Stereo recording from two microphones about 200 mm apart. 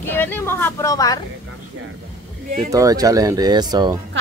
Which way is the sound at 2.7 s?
15° right (ahead or behind).